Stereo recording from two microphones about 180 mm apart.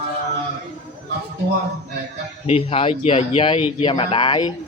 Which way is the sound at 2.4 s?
35° left (ahead or behind).